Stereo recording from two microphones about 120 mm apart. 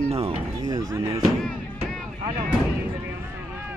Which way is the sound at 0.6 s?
30° right (ahead or behind).